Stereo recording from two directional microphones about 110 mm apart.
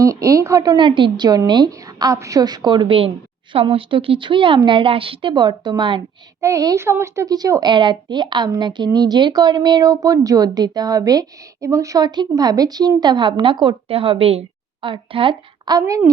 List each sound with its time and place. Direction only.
0.0 s speech: 30° right (ahead or behind)
6.4 s a child's voice: 30° right (ahead or behind)
7.7 s speech: 45° right (ahead or behind)